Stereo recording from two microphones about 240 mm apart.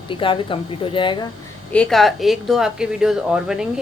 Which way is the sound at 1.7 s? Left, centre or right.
Centre.